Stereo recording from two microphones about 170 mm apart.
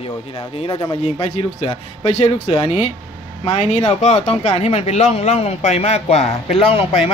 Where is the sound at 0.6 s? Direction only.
30° left (ahead or behind).